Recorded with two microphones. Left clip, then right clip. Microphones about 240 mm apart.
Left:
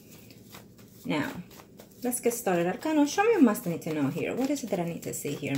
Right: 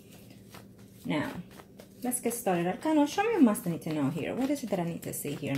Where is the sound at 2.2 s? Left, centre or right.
Centre.